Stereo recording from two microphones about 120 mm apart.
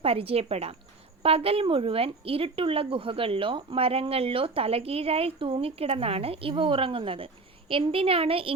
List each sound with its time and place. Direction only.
0.0 s a woman's voice: 55° right (ahead or behind)